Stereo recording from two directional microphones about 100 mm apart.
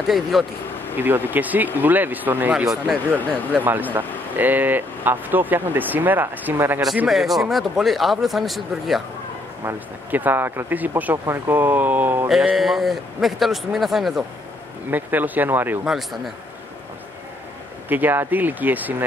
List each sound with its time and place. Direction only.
0.1 s speech: centre (ahead or behind)
0.9 s speech: 20° right (ahead or behind)
7.1 s speech: centre (ahead or behind)
10.1 s speech: 20° right (ahead or behind)
12.3 s speech: 5° right (ahead or behind)
14.9 s speech: 20° right (ahead or behind)
17.8 s speech: 20° right (ahead or behind)